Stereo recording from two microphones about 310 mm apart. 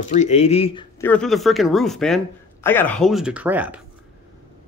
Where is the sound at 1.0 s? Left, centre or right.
Centre.